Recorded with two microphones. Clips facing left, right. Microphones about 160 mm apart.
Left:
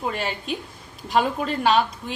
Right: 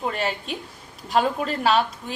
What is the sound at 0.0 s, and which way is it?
A woman's voice, centre (ahead or behind).